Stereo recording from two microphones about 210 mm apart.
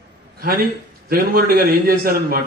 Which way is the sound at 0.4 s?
45° right (ahead or behind).